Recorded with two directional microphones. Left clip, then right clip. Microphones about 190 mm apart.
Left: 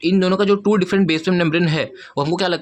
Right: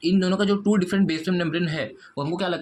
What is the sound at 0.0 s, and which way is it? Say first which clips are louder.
Speech: left 6 dB; 30° left (ahead or behind).